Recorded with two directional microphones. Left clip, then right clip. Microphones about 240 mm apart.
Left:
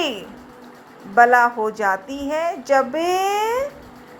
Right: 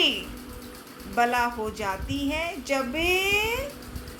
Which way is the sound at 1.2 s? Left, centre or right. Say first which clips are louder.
Left 10 dB; left.